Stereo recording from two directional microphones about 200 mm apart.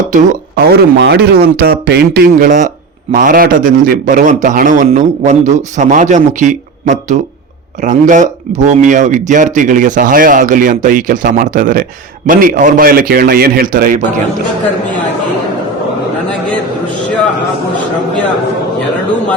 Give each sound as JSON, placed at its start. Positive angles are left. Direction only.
{"t": 0.1, "sound": "speech", "side_deg": -40}